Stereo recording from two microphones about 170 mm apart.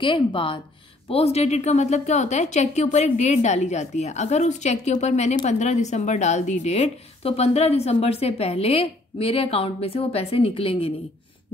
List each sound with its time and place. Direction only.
0.0 s a woman's voice: 30° left (ahead or behind)